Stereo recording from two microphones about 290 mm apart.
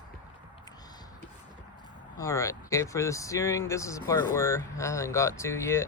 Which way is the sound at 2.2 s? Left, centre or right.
Centre.